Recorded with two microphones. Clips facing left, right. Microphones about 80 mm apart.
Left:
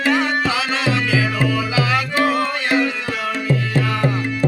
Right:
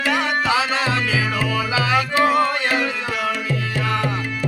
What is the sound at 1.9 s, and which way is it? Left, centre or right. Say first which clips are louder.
Music: right 3 dB; centre.